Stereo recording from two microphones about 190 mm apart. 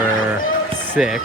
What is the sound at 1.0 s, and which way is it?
Speech, centre (ahead or behind).